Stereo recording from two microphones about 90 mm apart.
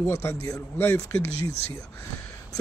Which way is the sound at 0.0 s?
30° left (ahead or behind).